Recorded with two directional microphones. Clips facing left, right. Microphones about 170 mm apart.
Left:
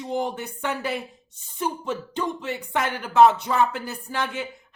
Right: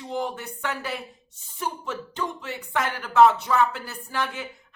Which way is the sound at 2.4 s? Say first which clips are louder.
Left 2 dB; 20° left (ahead or behind).